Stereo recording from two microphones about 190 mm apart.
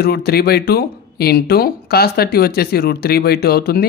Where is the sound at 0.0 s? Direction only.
55° left (ahead or behind).